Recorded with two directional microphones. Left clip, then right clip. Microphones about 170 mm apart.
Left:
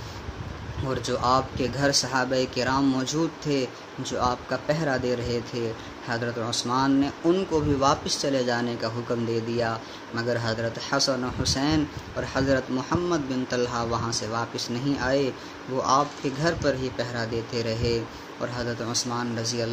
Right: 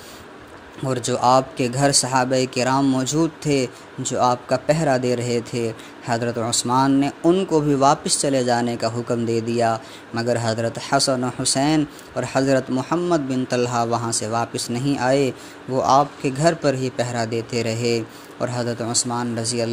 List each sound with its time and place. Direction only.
0.8 s speech: 40° right (ahead or behind)